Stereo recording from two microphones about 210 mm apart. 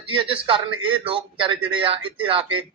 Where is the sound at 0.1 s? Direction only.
25° right (ahead or behind).